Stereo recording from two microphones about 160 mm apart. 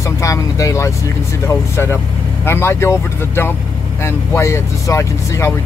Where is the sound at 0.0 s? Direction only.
20° left (ahead or behind).